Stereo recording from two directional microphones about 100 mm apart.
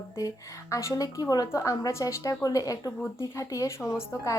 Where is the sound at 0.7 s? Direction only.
30° left (ahead or behind).